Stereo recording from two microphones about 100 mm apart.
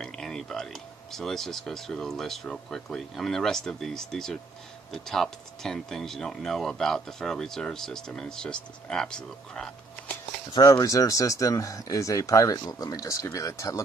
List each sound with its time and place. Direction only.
0.0 s speech: 5° left (ahead or behind)
10.5 s speech: 40° left (ahead or behind)